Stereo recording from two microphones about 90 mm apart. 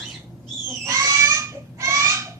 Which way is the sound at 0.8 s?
35° right (ahead or behind).